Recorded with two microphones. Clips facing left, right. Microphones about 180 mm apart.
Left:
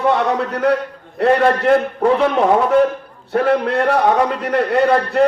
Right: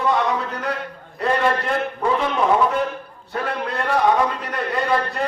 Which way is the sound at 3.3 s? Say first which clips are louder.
Left 10 dB; 65° left (ahead or behind).